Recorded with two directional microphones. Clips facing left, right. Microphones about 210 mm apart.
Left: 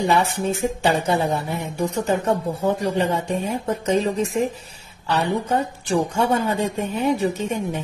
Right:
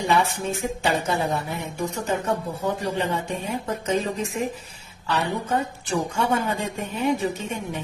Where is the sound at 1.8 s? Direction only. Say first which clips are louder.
Left 5 dB; 40° left (ahead or behind).